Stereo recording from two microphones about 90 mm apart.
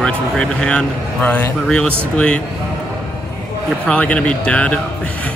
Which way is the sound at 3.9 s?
10° left (ahead or behind).